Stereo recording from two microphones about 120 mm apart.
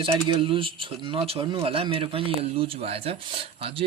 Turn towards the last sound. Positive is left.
turn(degrees=-50)  # may be behind; listen again after turning